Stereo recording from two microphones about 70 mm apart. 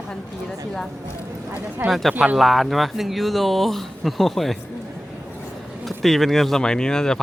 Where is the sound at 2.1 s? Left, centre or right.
Centre.